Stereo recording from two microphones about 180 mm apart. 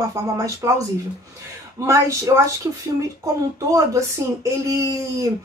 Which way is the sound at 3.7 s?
15° right (ahead or behind).